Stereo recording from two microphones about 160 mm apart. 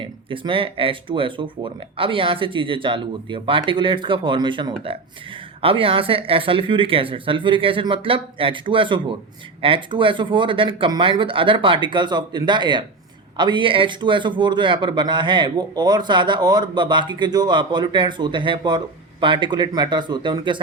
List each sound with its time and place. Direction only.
0.0 s a man's voice: 35° right (ahead or behind)